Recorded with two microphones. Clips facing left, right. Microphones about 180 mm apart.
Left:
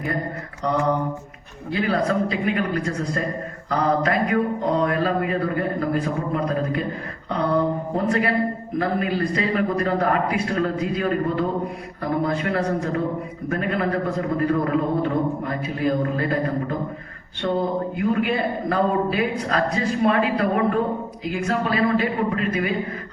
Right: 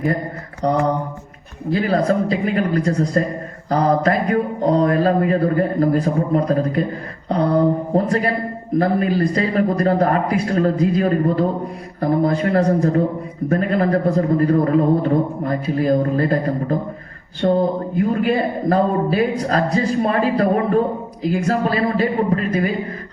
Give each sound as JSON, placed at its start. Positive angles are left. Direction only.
{"t": 0.6, "sound": "a man's voice", "side_deg": -35}